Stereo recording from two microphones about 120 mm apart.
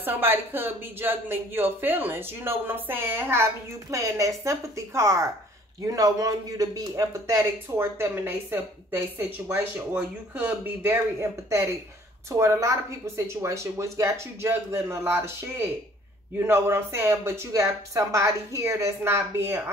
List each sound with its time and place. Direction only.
0.0 s a woman's voice: 15° right (ahead or behind)